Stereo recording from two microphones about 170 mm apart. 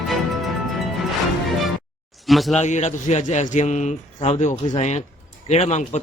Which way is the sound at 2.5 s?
45° left (ahead or behind).